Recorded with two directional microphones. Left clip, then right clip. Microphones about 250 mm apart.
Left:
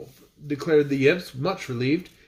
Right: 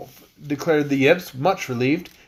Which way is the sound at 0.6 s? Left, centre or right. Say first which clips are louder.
Right 2 dB; centre.